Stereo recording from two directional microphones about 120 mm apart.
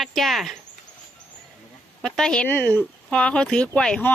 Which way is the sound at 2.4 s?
15° left (ahead or behind).